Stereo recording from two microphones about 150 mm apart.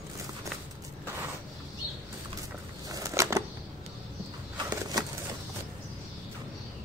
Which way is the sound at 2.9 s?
20° right (ahead or behind).